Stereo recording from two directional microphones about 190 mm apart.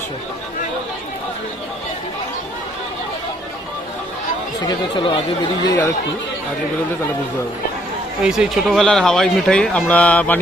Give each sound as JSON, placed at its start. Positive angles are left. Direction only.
{"t": 4.6, "sound": "speech", "side_deg": 25}
{"t": 8.2, "sound": "speech", "side_deg": -5}